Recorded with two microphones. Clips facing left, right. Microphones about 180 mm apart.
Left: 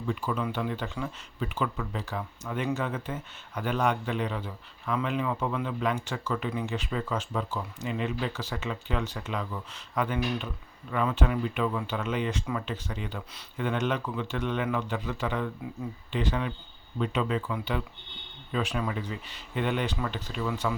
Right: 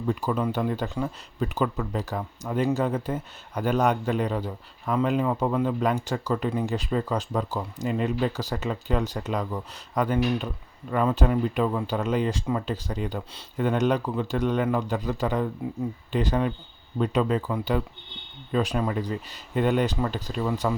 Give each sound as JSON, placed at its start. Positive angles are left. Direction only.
{"t": 0.0, "sound": "a man's voice", "side_deg": -40}